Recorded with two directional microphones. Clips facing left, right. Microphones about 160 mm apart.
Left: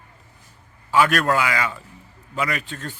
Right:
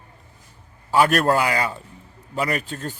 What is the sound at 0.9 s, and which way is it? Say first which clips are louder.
Speech: right 1 dB; 40° right (ahead or behind).